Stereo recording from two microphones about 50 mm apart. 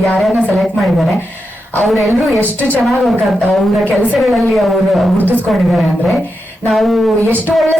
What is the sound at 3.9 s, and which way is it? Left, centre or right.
Speech, left.